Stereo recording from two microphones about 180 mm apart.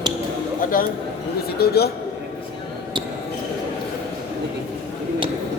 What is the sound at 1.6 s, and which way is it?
Speech, 60° left (ahead or behind).